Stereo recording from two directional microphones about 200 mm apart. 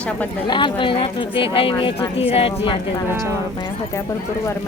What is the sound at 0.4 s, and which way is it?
Speech, 25° left (ahead or behind).